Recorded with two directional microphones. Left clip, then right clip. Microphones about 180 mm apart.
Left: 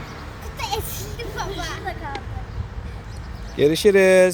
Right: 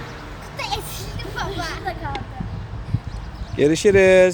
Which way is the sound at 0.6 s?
10° right (ahead or behind).